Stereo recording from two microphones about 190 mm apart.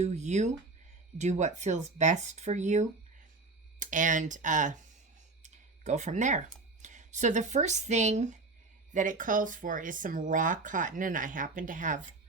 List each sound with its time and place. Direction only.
0.0 s speech: 35° right (ahead or behind)
5.4 s a sound: 35° right (ahead or behind)
6.8 s speech: 40° right (ahead or behind)